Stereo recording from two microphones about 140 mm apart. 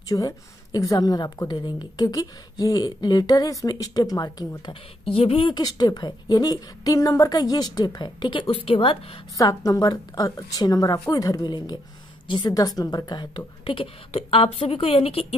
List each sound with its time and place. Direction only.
0.1 s a woman's voice: 25° left (ahead or behind)
9.4 s a woman's voice: 25° left (ahead or behind); by 15.2 s 45° left (ahead or behind)